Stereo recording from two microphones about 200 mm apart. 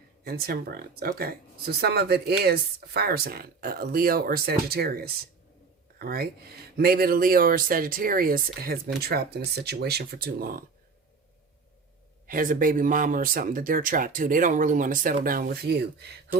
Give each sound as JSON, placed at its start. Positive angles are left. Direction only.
{"t": 0.3, "sound": "speech", "side_deg": -50}
{"t": 12.3, "sound": "speech", "side_deg": -45}